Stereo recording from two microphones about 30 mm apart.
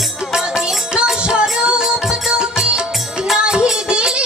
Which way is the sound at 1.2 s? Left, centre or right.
Right.